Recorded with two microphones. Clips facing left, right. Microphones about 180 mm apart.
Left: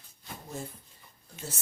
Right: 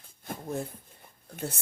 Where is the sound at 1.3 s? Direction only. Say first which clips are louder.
Right 6 dB; 55° right (ahead or behind).